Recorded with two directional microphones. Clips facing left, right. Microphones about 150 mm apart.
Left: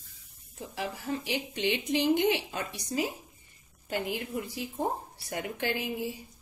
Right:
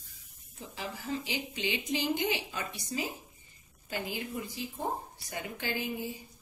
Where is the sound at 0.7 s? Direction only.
65° left (ahead or behind).